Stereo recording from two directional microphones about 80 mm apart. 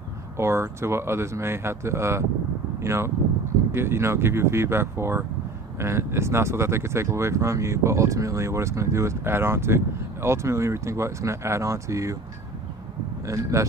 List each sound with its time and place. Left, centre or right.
0.4 s speech: right
13.3 s speech: right